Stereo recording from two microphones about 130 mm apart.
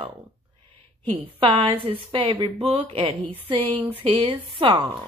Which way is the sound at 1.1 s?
45° right (ahead or behind).